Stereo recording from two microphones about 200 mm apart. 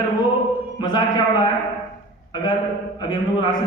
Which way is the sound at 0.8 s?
20° left (ahead or behind).